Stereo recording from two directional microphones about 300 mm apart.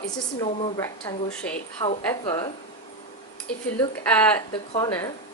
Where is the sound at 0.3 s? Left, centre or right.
Centre.